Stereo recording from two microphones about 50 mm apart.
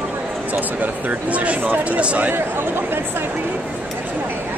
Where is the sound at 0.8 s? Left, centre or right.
Right.